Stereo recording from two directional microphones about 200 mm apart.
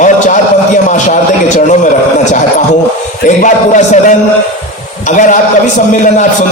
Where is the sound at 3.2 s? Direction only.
40° left (ahead or behind).